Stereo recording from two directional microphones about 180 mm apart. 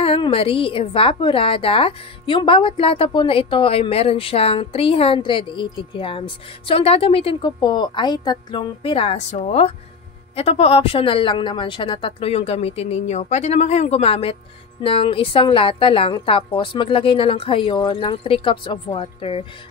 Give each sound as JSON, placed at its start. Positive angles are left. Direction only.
{"t": 0.0, "sound": "a woman's voice", "side_deg": 30}